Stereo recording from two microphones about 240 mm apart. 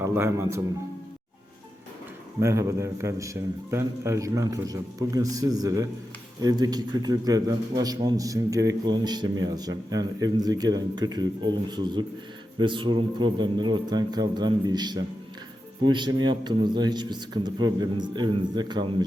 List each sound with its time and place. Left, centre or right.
0.0 s speech: centre
2.4 s a man's voice: centre